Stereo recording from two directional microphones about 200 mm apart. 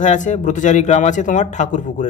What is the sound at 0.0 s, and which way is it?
A man's voice, 40° left (ahead or behind).